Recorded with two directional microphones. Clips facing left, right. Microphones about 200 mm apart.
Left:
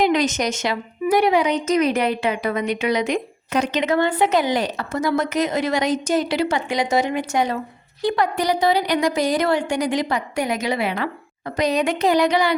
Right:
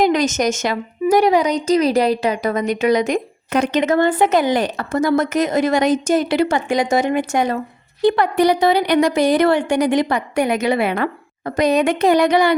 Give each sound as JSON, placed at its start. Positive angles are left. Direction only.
{"t": 0.0, "sound": "a woman's voice", "side_deg": -45}